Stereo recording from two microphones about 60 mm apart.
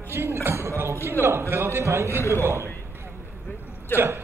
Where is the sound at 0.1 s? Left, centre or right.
Right.